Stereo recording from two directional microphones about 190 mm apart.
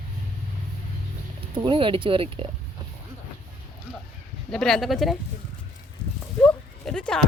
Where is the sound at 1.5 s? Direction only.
25° right (ahead or behind).